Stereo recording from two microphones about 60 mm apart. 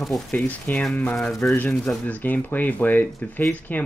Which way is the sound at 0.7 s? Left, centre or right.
Left.